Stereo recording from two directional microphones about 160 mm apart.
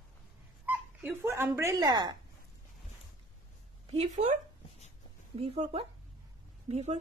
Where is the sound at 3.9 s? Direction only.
45° right (ahead or behind).